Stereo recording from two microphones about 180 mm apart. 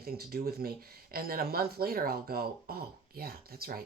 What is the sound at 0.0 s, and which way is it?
Speech, 55° right (ahead or behind).